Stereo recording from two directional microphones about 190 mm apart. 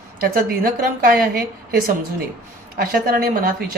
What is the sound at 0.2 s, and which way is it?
A woman's voice, 50° right (ahead or behind).